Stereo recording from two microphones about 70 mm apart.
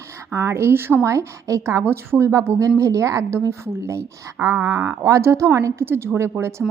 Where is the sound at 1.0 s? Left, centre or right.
Right.